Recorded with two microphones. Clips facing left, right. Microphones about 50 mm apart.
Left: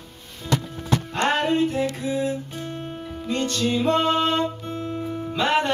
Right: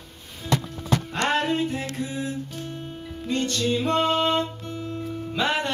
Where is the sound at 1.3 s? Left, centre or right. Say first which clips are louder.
Left 2 dB; centre.